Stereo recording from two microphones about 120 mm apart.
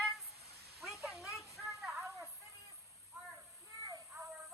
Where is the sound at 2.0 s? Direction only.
25° right (ahead or behind).